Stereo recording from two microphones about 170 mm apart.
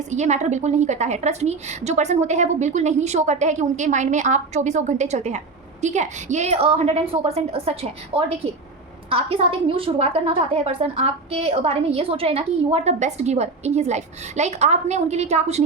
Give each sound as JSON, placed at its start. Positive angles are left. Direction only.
{"t": 0.1, "sound": "a woman's voice", "side_deg": -45}